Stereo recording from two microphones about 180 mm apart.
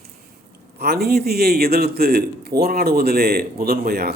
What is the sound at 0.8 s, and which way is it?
A man's voice, 60° right (ahead or behind).